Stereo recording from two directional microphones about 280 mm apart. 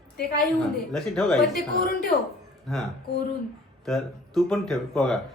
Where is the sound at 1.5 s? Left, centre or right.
Left.